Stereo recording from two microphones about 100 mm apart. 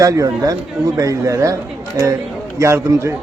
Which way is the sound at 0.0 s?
35° right (ahead or behind).